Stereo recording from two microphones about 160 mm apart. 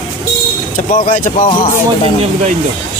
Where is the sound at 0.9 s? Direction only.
60° left (ahead or behind).